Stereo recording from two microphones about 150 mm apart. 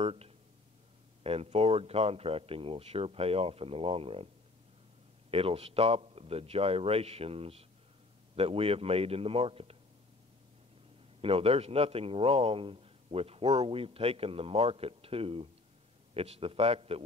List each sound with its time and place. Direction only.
0.0 s a man's voice: 40° right (ahead or behind)
5.3 s a man's voice: 40° right (ahead or behind)
11.1 s a man's voice: 40° right (ahead or behind)